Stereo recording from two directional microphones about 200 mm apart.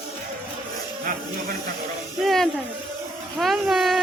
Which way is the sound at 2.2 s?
Centre (ahead or behind).